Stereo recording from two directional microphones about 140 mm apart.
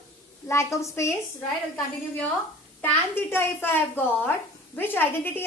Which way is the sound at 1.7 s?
10° left (ahead or behind).